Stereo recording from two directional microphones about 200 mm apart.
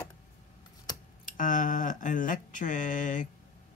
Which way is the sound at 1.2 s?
40° left (ahead or behind).